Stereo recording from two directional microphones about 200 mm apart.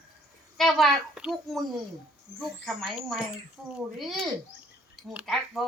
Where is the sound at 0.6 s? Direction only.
Centre (ahead or behind).